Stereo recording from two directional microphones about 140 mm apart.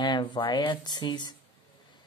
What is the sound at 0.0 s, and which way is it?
Speech, 35° left (ahead or behind).